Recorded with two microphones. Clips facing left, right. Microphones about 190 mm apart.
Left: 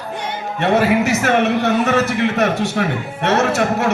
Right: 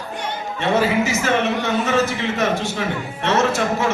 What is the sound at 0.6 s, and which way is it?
A man's voice, 65° left (ahead or behind).